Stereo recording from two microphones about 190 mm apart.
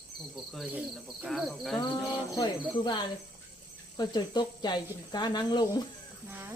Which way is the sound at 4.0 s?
20° left (ahead or behind).